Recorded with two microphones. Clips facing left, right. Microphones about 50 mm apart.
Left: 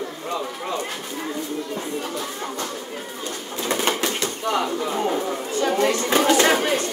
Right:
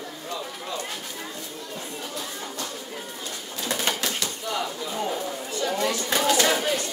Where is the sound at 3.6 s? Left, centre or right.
Left.